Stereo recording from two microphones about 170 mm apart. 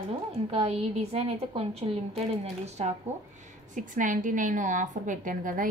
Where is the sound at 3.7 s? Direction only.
50° right (ahead or behind).